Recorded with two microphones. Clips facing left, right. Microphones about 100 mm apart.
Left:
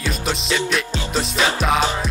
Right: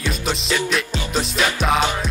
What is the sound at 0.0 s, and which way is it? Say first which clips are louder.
Music: even; centre (ahead or behind).